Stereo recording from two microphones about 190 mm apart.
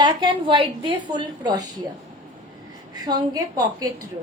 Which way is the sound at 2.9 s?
20° right (ahead or behind).